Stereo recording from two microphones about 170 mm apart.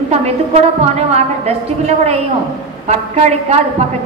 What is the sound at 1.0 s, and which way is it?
Speech, 40° right (ahead or behind).